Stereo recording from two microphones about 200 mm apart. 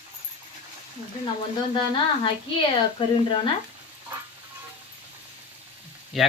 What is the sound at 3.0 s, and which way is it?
Speech, 25° left (ahead or behind).